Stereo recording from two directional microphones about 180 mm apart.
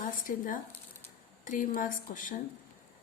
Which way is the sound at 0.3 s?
50° left (ahead or behind).